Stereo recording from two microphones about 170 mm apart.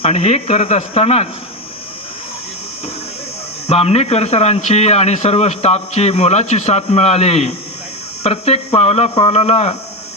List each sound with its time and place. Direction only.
0.0 s speech: 40° left (ahead or behind)
3.7 s speech: 35° left (ahead or behind)